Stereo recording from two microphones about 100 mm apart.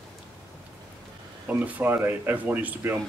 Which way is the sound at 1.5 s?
15° right (ahead or behind).